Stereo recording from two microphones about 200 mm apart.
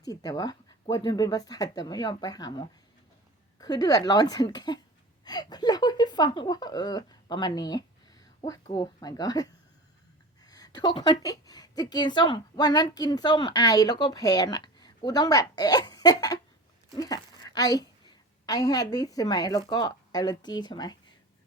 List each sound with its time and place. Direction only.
0.0 s a woman's voice: 20° left (ahead or behind)